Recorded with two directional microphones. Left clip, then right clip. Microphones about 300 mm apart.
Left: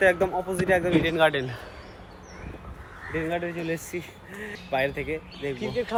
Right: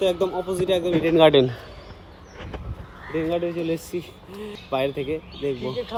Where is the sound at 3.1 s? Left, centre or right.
Centre.